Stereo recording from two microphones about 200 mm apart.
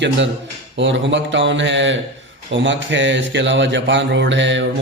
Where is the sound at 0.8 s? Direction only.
70° right (ahead or behind).